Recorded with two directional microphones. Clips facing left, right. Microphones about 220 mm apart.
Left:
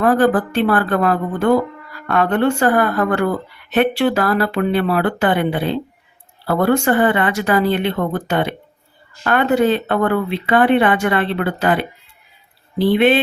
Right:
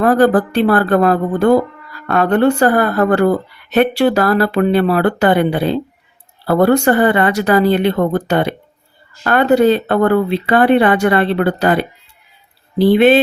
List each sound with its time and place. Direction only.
0.0 s speech: 40° right (ahead or behind)